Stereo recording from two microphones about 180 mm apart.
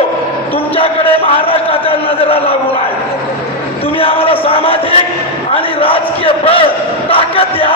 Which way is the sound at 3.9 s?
30° left (ahead or behind).